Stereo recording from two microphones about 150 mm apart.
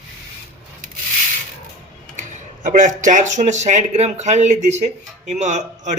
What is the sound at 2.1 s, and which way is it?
A man's voice, 55° right (ahead or behind).